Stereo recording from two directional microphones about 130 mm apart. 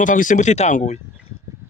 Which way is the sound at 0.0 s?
85° left.